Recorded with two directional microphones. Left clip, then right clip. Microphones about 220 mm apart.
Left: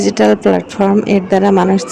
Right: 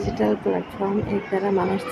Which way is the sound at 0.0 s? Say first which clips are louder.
Left 12 dB; 45° left (ahead or behind).